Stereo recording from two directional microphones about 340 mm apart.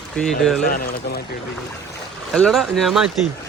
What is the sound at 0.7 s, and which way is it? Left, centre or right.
Speech, left.